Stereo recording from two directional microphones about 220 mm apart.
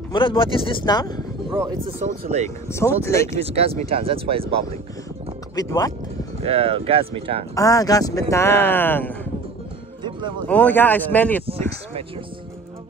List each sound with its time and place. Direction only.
0.1 s speech: 25° left (ahead or behind)
1.5 s speech: 25° right (ahead or behind)
2.7 s speech: 10° left (ahead or behind)
3.3 s speech: 25° right (ahead or behind)
5.6 s speech: 15° left (ahead or behind)
6.4 s speech: 25° right (ahead or behind)
7.5 s speech: 15° left (ahead or behind)
10.4 s speech: 5° left (ahead or behind)